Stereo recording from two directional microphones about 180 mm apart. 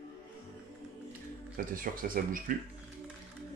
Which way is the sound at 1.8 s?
50° right (ahead or behind).